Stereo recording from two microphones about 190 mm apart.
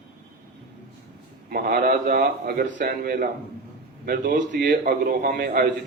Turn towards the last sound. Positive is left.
turn(degrees=-50)  # may be behind; listen again after turning